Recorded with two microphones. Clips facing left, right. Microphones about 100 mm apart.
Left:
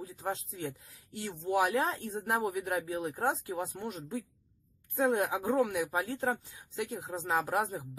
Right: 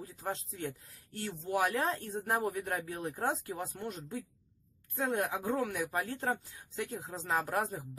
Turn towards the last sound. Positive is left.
turn(degrees=15)  # may be behind; listen again after turning